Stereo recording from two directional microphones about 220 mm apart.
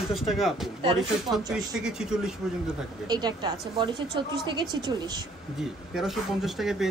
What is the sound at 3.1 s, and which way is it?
A woman's voice, 20° right (ahead or behind).